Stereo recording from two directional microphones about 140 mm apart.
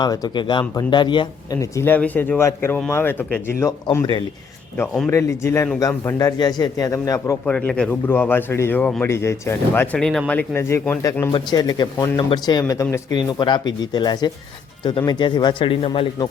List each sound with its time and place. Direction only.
0.0 s speech: 30° left (ahead or behind)
1.7 s speech: 15° left (ahead or behind)
5.1 s speech: 20° left (ahead or behind)
7.4 s speech: 5° left (ahead or behind)
11.3 s speech: 30° left (ahead or behind)